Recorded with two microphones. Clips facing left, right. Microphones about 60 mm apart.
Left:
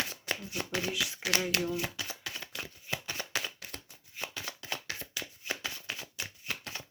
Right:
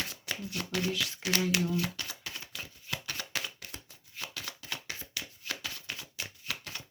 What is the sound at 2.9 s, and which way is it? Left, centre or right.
Shuffling cards, centre.